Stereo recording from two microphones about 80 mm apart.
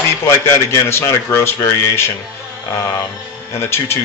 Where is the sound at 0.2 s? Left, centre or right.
Left.